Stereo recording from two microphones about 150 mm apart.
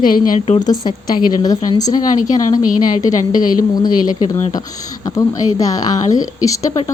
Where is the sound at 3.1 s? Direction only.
60° left (ahead or behind).